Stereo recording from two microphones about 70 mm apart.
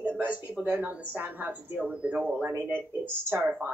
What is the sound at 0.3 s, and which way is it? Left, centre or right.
Speech, right.